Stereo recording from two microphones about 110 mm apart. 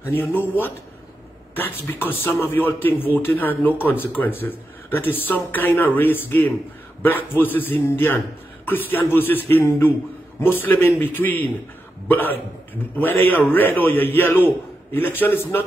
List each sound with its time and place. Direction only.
0.0 s speech: 20° left (ahead or behind)